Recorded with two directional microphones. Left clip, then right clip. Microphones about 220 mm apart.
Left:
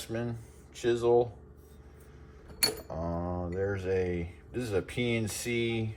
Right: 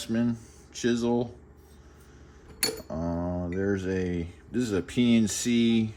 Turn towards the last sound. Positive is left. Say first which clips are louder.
# right 5 dB
turn(degrees=-50)  # may be behind; listen again after turning